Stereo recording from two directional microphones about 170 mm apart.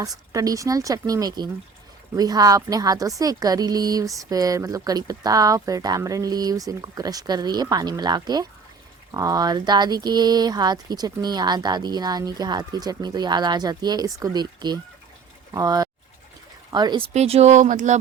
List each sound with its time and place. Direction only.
0.3 s a woman's voice: 20° right (ahead or behind)
17.2 s speech: 40° right (ahead or behind)